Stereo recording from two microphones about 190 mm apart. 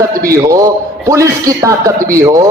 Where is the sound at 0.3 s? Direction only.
20° right (ahead or behind).